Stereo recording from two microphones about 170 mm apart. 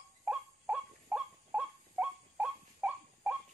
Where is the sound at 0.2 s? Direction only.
5° right (ahead or behind).